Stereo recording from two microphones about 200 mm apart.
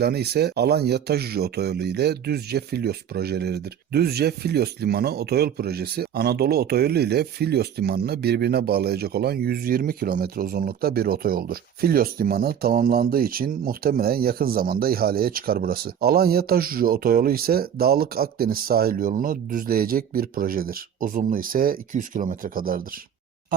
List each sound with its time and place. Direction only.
0.0 s speech: 55° right (ahead or behind)